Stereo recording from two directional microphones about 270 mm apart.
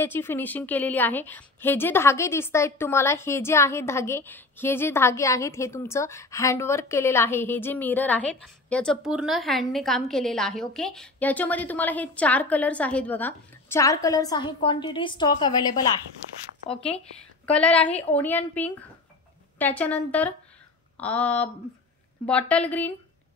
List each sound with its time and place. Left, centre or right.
0.0 s a woman's voice: centre
17.5 s a woman's voice: centre